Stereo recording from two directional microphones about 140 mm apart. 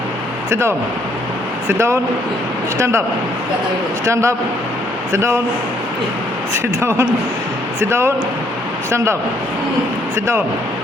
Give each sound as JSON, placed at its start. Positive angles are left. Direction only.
{"t": 1.6, "sound": "speech", "side_deg": -20}
{"t": 4.0, "sound": "speech", "side_deg": -20}
{"t": 6.8, "sound": "speech", "side_deg": -20}